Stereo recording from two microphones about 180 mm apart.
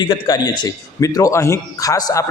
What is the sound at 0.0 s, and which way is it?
A man's voice, 20° left (ahead or behind).